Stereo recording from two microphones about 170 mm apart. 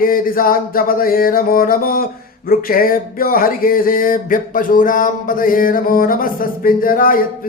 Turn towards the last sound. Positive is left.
turn(degrees=55)  # may be behind; listen again after turning